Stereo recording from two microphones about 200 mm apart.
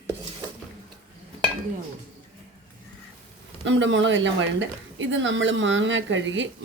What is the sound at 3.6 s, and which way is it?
Speech, 65° right (ahead or behind).